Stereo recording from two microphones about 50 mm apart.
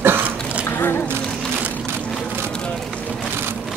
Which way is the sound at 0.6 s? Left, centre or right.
Left.